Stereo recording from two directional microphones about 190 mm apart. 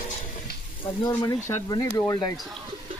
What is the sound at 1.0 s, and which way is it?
Speech, 20° left (ahead or behind).